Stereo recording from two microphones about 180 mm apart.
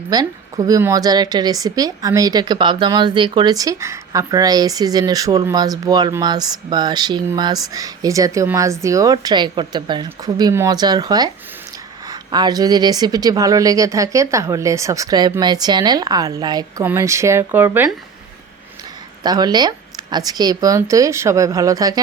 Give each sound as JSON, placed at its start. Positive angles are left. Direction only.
{"t": 0.1, "sound": "a woman's voice", "side_deg": -20}
{"t": 19.2, "sound": "a woman's voice", "side_deg": -20}